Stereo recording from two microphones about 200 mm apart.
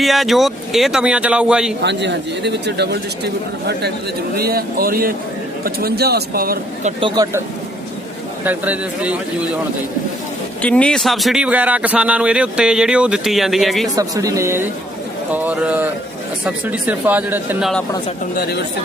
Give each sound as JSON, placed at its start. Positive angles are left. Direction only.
{"t": 0.0, "sound": "a man's voice", "side_deg": 0}
{"t": 1.8, "sound": "speech", "side_deg": -60}
{"t": 7.0, "sound": "speech", "side_deg": -20}
{"t": 8.4, "sound": "speech", "side_deg": -10}
{"t": 10.6, "sound": "a man's voice", "side_deg": 5}
{"t": 13.9, "sound": "speech", "side_deg": -15}